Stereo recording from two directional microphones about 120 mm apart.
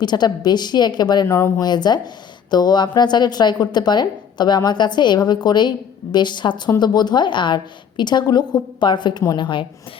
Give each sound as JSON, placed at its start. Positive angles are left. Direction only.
{"t": 0.0, "sound": "a woman's voice", "side_deg": 35}